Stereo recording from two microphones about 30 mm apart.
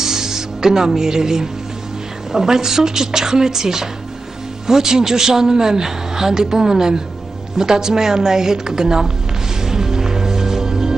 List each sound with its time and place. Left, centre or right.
0.0 s music: centre
2.3 s a woman's voice: centre
9.6 s music: centre